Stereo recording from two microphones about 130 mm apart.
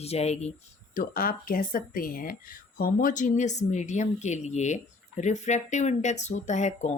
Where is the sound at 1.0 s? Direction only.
90° left.